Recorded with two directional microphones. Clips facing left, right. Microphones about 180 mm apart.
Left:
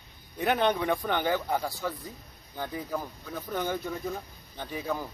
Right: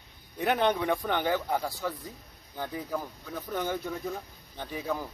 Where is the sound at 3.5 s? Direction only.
Centre (ahead or behind).